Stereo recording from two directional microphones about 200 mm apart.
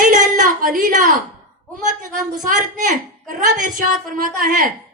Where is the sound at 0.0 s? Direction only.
40° right (ahead or behind).